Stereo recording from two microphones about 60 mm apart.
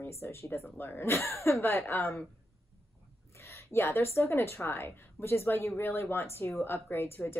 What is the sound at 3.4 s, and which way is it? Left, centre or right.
A woman's voice, left.